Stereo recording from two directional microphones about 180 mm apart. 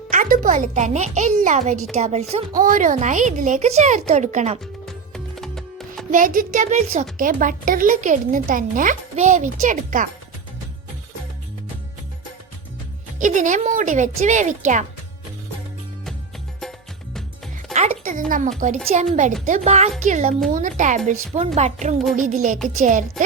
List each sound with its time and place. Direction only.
0.1 s a child's voice: 50° right (ahead or behind)
4.6 s music: centre (ahead or behind)
6.1 s a woman's voice: 50° right (ahead or behind)
13.1 s a woman's voice: 45° right (ahead or behind)
17.7 s music: 40° right (ahead or behind)
18.3 s a woman's voice: 45° right (ahead or behind)